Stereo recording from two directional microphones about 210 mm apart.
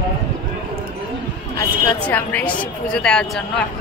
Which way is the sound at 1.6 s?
5° left (ahead or behind).